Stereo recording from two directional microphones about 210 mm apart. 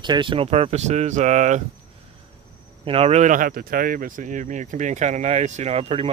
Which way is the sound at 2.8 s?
30° right (ahead or behind).